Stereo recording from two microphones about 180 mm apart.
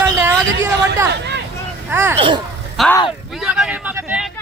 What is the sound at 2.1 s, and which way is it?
Speech, 30° right (ahead or behind).